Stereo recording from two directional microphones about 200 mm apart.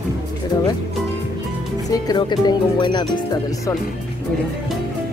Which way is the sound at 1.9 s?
20° left (ahead or behind).